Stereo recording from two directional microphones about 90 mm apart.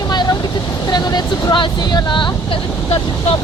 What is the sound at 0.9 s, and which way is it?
Speech, 55° left (ahead or behind).